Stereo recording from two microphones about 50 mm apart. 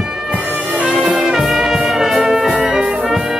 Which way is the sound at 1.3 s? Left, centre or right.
Centre.